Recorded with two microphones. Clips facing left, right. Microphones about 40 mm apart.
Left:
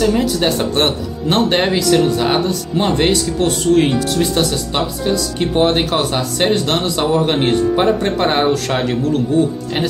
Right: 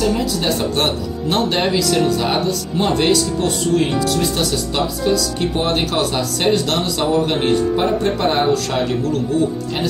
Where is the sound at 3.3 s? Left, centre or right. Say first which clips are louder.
Left 4 dB; left.